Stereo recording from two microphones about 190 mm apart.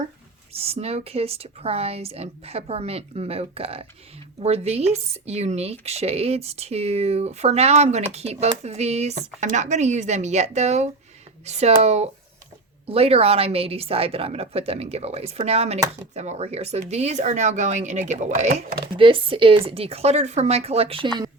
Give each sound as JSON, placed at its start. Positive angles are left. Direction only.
{"t": 0.5, "sound": "speech", "side_deg": -30}